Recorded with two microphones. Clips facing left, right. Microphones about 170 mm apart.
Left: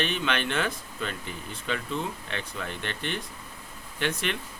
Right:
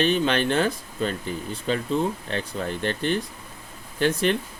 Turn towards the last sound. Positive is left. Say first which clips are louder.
# right 8 dB
turn(degrees=-35)  # may be behind; listen again after turning